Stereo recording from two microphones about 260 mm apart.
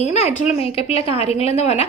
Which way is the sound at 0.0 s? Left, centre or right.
Left.